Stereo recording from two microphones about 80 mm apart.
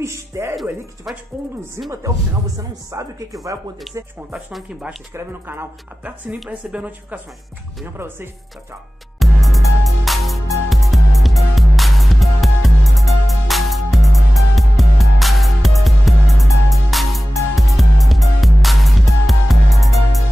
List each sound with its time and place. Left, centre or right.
0.0 s speech: right
1.1 s speech: centre
1.9 s speech: right
3.9 s speech: centre
5.1 s speech: right
6.7 s speech: centre
7.8 s speech: right
9.2 s music: centre